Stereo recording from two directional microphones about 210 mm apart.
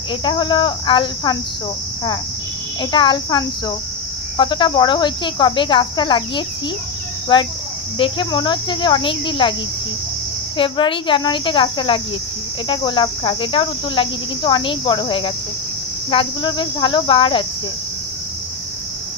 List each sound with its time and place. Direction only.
0.2 s cricket: 20° left (ahead or behind)
2.8 s cricket: 20° left (ahead or behind)
10.6 s cricket: 25° left (ahead or behind)